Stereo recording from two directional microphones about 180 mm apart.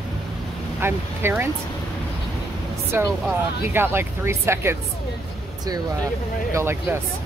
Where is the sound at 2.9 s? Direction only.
10° right (ahead or behind).